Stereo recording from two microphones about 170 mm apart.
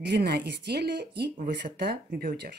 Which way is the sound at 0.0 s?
75° right (ahead or behind).